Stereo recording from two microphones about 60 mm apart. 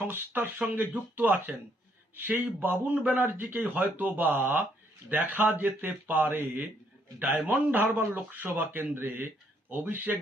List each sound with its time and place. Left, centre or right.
0.3 s a man's voice: right